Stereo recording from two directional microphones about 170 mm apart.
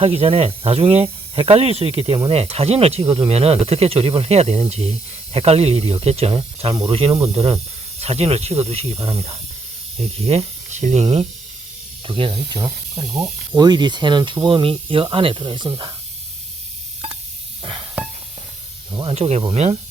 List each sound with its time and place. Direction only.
0.0 s speech: 35° right (ahead or behind)
13.0 s snake: centre (ahead or behind)
13.6 s speech: 25° right (ahead or behind)
17.6 s music: 30° right (ahead or behind)
18.9 s speech: 25° right (ahead or behind)
19.1 s speech: 40° right (ahead or behind)